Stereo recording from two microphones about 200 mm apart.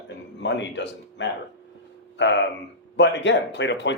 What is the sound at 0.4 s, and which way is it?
Speech, 60° left (ahead or behind).